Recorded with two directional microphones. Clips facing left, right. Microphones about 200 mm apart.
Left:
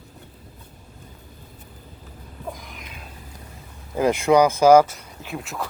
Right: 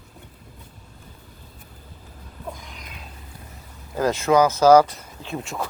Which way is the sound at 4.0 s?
15° left (ahead or behind).